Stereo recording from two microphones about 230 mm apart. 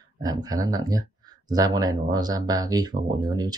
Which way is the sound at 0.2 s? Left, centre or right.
Centre.